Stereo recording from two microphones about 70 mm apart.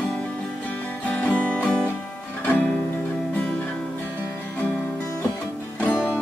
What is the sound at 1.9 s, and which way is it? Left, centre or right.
Music, left.